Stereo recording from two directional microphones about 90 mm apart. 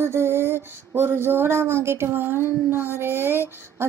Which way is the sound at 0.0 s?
30° right (ahead or behind).